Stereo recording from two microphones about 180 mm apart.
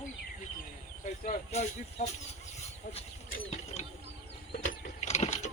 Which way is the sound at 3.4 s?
35° left (ahead or behind).